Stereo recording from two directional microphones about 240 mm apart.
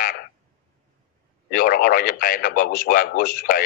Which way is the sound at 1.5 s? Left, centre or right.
Left.